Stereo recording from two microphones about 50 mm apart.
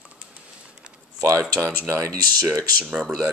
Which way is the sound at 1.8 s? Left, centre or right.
Right.